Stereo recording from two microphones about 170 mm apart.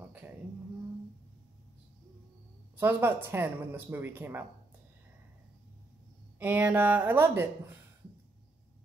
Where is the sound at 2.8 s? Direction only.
15° right (ahead or behind).